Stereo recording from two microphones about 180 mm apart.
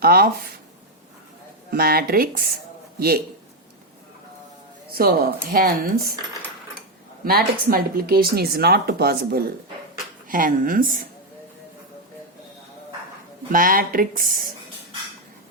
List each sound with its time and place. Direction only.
0.0 s speech: 55° right (ahead or behind)
1.7 s speech: 55° right (ahead or behind)
4.9 s speech: 55° right (ahead or behind)
7.3 s speech: 55° right (ahead or behind)
13.5 s speech: 50° right (ahead or behind)